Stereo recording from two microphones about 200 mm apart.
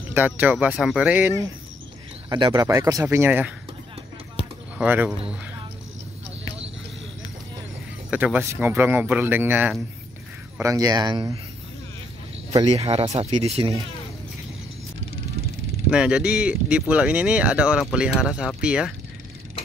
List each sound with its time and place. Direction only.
0.1 s speech: 10° right (ahead or behind)
2.2 s speech: 20° right (ahead or behind)
4.7 s speech: 5° right (ahead or behind)
8.1 s speech: 5° right (ahead or behind)
12.8 s speech: 30° right (ahead or behind)
15.9 s speech: 5° right (ahead or behind)